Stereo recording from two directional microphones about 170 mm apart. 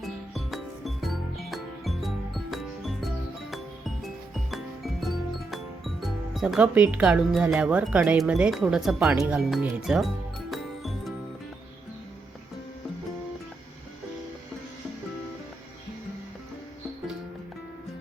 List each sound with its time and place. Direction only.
0.0 s music: centre (ahead or behind)
9.1 s speech: 10° right (ahead or behind)
10.5 s music: centre (ahead or behind)